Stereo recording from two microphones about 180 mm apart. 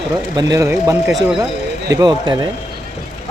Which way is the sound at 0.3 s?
20° right (ahead or behind).